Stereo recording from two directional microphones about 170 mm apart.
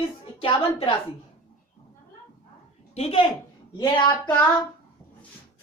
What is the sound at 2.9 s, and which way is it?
Speech, 35° left (ahead or behind).